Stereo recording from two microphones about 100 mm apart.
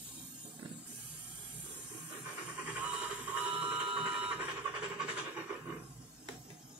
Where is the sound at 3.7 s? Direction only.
10° right (ahead or behind).